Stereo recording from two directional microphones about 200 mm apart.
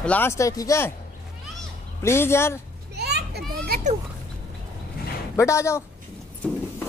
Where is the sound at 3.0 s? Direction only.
55° right (ahead or behind).